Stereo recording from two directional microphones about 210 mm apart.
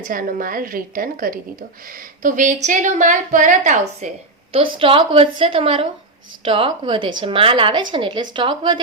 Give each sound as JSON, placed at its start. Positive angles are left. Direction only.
{"t": 0.1, "sound": "a woman's voice", "side_deg": -40}
{"t": 4.5, "sound": "a woman's voice", "side_deg": -25}